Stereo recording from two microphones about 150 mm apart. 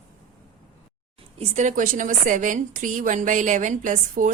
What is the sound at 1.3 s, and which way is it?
A woman's voice, 50° right (ahead or behind).